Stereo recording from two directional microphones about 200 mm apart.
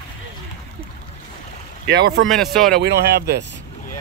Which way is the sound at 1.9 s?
55° right (ahead or behind).